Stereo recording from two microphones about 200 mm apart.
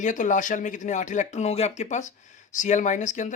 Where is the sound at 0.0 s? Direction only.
40° left (ahead or behind).